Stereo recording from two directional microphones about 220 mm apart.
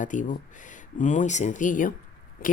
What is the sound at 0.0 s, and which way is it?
Speech, 35° left (ahead or behind).